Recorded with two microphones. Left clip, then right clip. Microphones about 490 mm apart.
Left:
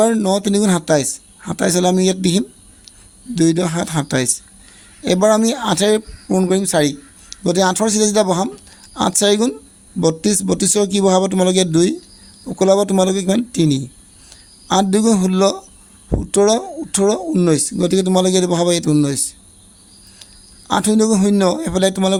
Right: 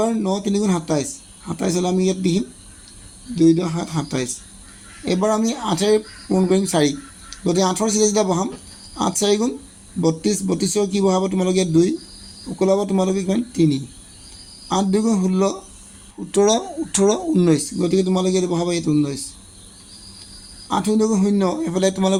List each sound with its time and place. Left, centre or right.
0.0 s speech: left
3.3 s speech: left
20.7 s speech: left